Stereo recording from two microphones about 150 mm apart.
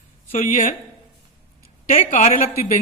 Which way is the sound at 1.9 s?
55° left (ahead or behind).